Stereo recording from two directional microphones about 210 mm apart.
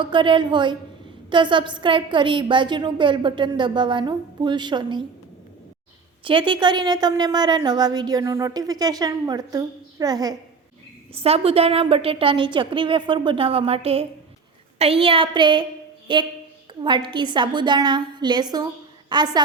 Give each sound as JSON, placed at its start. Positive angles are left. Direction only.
{"t": 0.0, "sound": "a woman's voice", "side_deg": -25}
{"t": 6.2, "sound": "a woman's voice", "side_deg": -25}